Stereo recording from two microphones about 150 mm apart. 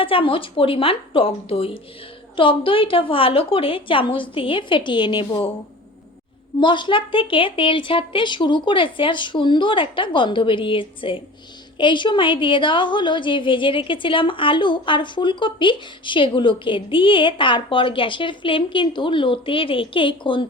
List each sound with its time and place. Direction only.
0.0 s a woman's voice: 35° left (ahead or behind)
6.6 s a woman's voice: 30° left (ahead or behind)